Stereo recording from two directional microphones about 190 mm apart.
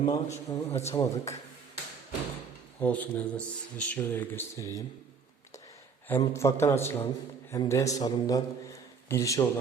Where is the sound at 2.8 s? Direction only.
5° left (ahead or behind).